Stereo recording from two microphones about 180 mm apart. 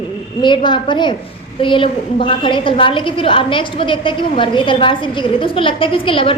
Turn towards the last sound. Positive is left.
turn(degrees=30)  # may be behind; listen again after turning